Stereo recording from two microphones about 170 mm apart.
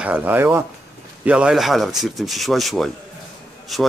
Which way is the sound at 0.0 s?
10° right (ahead or behind).